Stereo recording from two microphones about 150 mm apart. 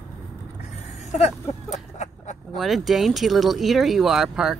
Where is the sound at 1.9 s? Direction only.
50° left (ahead or behind).